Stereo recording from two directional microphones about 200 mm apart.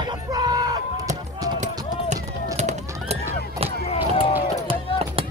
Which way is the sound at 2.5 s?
35° right (ahead or behind).